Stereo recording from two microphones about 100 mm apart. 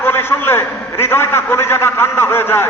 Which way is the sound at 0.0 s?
25° left (ahead or behind).